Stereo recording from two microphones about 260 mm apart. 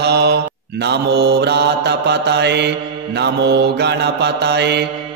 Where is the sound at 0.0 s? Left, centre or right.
Right.